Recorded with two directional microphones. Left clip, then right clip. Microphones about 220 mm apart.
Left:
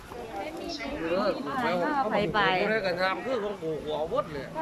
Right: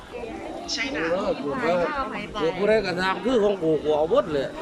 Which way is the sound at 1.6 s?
25° left (ahead or behind).